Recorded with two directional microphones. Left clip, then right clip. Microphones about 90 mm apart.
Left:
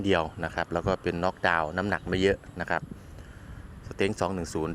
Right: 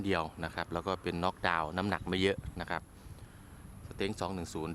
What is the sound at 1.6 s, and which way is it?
Speech, 35° right (ahead or behind).